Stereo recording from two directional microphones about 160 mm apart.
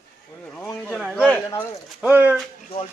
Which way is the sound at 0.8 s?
Centre (ahead or behind).